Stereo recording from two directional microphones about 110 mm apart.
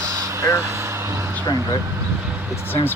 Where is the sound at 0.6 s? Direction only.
25° right (ahead or behind).